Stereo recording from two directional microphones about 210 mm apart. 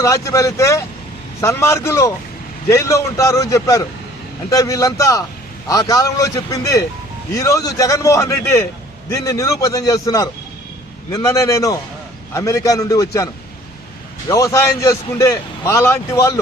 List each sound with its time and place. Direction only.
0.0 s a man's voice: 15° left (ahead or behind)
14.3 s a man's voice: 15° left (ahead or behind)